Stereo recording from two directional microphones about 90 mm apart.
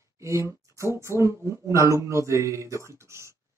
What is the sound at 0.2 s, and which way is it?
Speech, 35° right (ahead or behind).